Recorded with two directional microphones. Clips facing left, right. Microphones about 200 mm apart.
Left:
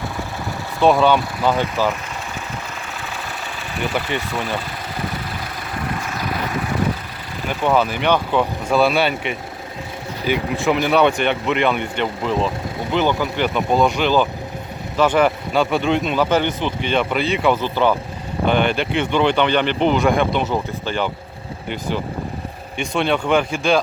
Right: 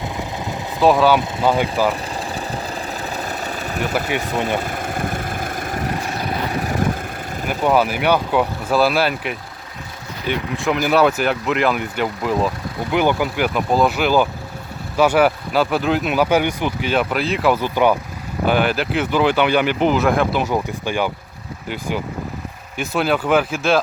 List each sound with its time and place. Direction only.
0.8 s speech: centre (ahead or behind)
3.0 s engine: 40° right (ahead or behind)
4.5 s vehicle: 45° right (ahead or behind)
7.6 s speech: 10° right (ahead or behind)